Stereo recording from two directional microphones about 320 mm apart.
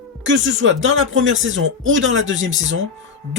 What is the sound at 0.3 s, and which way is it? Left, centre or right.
Speech, right.